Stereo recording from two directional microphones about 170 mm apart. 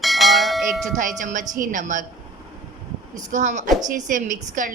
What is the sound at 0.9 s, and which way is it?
A woman's voice, 50° right (ahead or behind).